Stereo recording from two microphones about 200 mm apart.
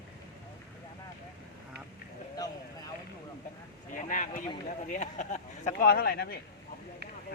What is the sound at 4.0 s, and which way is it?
Speech, 40° left (ahead or behind).